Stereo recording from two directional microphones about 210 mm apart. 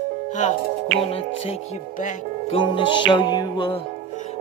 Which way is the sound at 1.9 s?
35° left (ahead or behind).